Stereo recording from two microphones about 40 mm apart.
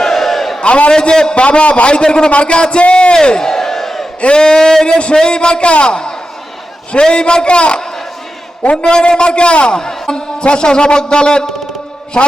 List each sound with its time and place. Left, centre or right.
0.0 s crowd: centre
0.6 s a man's voice: left
1.5 s a man's voice: left; by 4.0 s centre
4.2 s a sound: left
5.1 s a man's voice: left
8.8 s a man's voice: centre